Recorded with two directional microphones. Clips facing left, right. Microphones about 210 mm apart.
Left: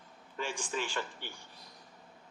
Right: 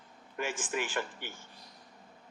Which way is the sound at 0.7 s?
15° right (ahead or behind).